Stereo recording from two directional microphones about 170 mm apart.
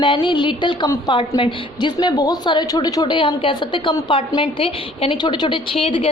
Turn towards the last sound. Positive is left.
turn(degrees=35)  # may be behind; listen again after turning